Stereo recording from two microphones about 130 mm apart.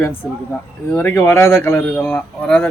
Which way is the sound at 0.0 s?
15° left (ahead or behind).